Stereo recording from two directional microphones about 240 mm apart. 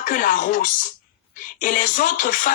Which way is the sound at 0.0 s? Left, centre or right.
Left.